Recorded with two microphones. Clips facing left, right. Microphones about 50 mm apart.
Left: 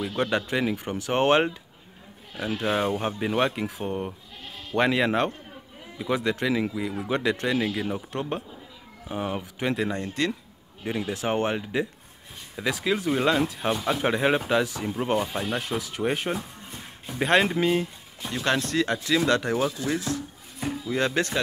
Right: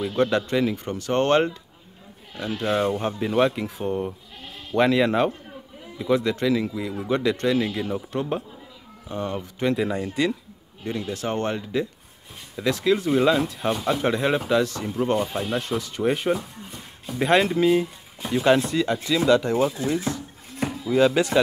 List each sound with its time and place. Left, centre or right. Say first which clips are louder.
0.0 s speech: right 4 dB; centre
9.1 s speech: right 1 dB; centre
10.8 s speech: even; centre
18.2 s speech: right 7 dB; centre
20.5 s a sound: right 3 dB; right
20.9 s speech: right 8 dB; centre